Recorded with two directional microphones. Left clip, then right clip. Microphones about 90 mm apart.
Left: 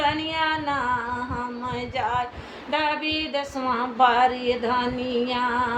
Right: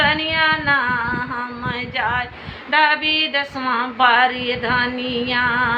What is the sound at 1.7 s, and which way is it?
Female singing, 30° left (ahead or behind).